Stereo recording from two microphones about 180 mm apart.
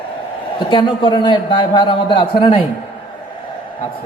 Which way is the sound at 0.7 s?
25° left (ahead or behind).